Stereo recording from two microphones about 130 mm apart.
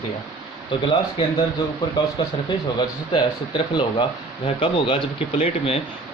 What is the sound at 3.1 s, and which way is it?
Speech, 35° left (ahead or behind).